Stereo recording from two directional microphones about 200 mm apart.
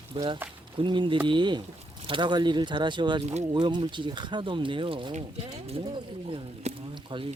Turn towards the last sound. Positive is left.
turn(degrees=-25)  # may be behind; listen again after turning